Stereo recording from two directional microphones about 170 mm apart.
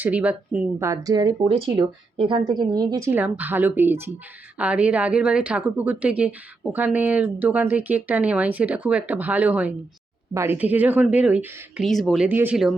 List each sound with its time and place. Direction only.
0.0 s speech: 10° right (ahead or behind)